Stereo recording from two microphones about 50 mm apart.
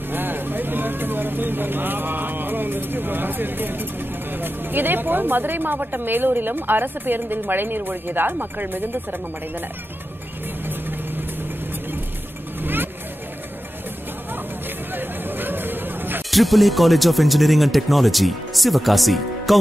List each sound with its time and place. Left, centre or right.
0.1 s vehicle: right
4.3 s speech: right
15.0 s a sound: right
16.3 s speech: centre